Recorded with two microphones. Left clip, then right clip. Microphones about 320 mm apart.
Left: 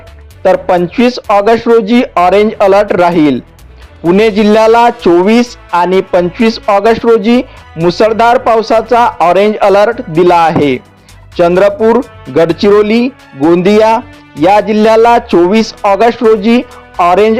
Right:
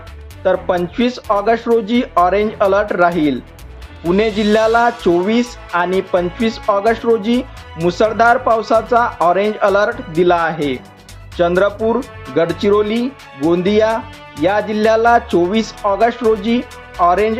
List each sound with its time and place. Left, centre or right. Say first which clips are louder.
0.9 s speech: left 7 dB; left